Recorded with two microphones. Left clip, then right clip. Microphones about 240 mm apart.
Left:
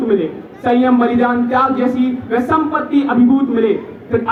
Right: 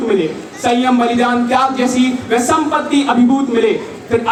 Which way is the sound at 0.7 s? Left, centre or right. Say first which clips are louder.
Even; right.